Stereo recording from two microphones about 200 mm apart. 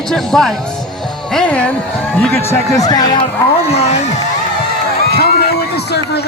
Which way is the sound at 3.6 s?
30° left (ahead or behind).